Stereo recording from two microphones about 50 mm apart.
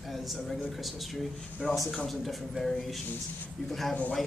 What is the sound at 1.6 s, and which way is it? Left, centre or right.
Speech, left.